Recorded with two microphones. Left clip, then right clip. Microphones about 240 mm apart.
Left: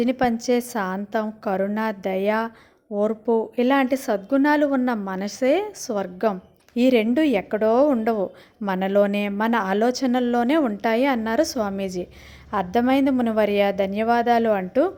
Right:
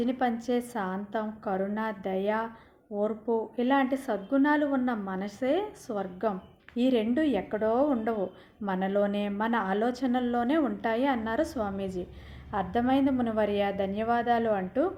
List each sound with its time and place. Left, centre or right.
0.0 s speech: left